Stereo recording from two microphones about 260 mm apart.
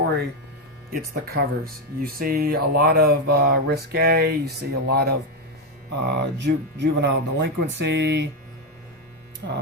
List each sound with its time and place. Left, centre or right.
0.9 s speech: right